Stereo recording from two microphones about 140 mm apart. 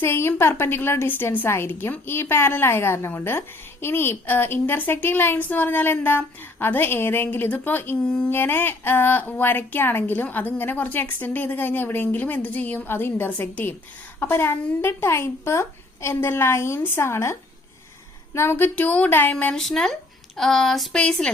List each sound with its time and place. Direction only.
0.0 s a woman's voice: 15° left (ahead or behind)
18.3 s a woman's voice: 15° left (ahead or behind)